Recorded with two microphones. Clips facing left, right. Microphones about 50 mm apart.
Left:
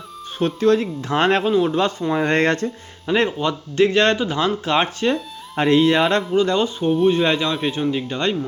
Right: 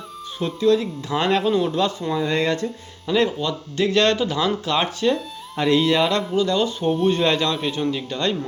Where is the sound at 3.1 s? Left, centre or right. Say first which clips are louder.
Left 1 dB; left.